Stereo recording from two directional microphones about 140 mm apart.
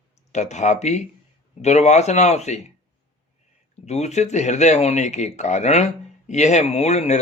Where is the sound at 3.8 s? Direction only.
55° left (ahead or behind).